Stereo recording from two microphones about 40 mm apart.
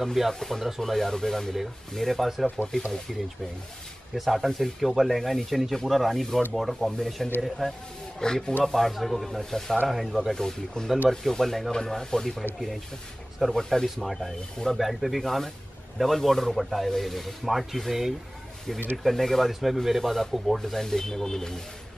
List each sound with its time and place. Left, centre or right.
0.0 s speech: centre
1.5 s speech: centre
2.7 s speech: centre
3.1 s speech: centre
8.2 s speech: centre
8.7 s speech: centre
10.3 s speech: centre
13.6 s speech: centre
13.8 s speech: centre
14.1 s speech: centre
14.8 s speech: centre
20.8 s speech: centre